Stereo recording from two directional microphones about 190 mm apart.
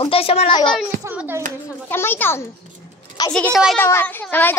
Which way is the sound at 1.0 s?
10° right (ahead or behind).